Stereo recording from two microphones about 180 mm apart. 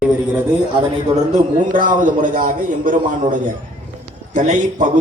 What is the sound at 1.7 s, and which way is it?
A man's voice, 45° right (ahead or behind).